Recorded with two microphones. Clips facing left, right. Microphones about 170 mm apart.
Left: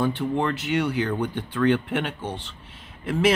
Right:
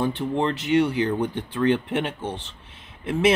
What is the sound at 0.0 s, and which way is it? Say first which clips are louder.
Speech: even; 25° right (ahead or behind).